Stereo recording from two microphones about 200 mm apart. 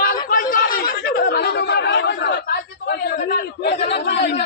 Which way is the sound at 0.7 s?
45° left (ahead or behind).